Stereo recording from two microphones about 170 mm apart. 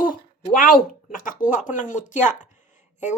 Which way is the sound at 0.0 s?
55° left (ahead or behind).